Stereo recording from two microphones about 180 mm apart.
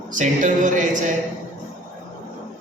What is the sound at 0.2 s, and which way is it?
Speech, 45° right (ahead or behind).